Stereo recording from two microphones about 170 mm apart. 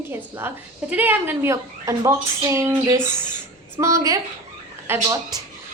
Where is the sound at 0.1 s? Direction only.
15° right (ahead or behind).